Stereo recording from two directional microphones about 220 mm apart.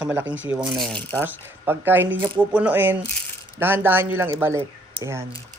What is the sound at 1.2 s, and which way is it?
Speech, 10° right (ahead or behind).